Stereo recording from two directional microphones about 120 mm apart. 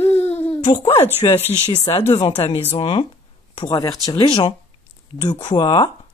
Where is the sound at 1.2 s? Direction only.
40° left (ahead or behind).